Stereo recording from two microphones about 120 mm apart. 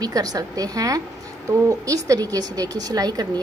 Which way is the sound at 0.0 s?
30° right (ahead or behind).